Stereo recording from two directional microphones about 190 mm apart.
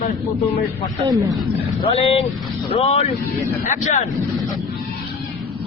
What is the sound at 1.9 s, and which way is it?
Speech, 30° left (ahead or behind).